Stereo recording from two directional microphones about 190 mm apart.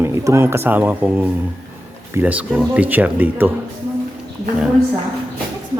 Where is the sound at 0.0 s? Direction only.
15° right (ahead or behind).